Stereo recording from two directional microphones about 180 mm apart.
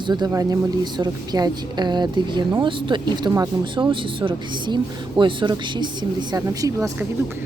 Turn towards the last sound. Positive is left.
turn(degrees=-20)  # may be behind; listen again after turning